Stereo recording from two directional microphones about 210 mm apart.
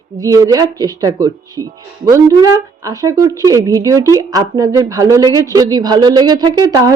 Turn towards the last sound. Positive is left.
turn(degrees=-20)  # may be behind; listen again after turning